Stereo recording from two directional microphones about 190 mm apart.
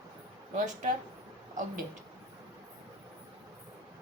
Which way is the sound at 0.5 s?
40° right (ahead or behind).